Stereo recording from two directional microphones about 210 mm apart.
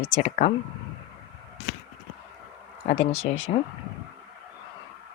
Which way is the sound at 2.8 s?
30° left (ahead or behind).